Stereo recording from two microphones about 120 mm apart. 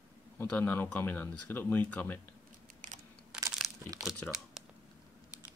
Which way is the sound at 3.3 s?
5° right (ahead or behind).